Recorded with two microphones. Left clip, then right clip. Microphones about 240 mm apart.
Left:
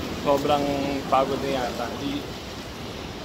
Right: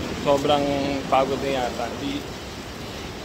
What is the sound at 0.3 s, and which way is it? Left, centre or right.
Speech, right.